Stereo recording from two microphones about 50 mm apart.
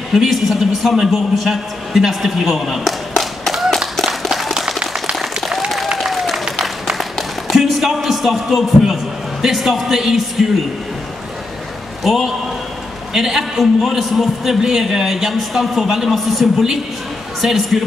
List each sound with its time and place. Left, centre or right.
0.1 s a man's voice: centre
3.9 s a sound: centre
5.2 s applause: centre
6.5 s a sound: centre
9.4 s a man's voice: centre
12.0 s a man's voice: centre